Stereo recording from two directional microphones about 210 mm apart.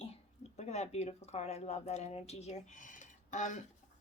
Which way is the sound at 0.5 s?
30° left (ahead or behind).